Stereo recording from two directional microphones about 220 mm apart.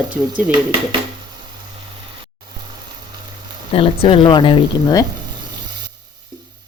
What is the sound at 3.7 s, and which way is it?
Speech, 25° left (ahead or behind).